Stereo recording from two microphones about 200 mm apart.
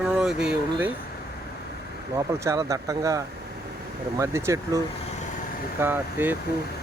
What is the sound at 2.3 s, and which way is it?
Speech, 15° right (ahead or behind).